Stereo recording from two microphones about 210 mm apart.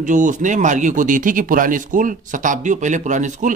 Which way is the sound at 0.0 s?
35° right (ahead or behind).